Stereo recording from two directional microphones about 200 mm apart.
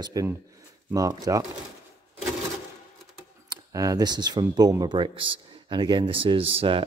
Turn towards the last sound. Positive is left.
turn(degrees=-25)  # may be behind; listen again after turning